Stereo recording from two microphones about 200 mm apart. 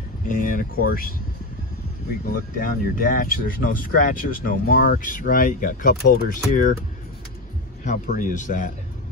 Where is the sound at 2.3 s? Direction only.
45° left (ahead or behind).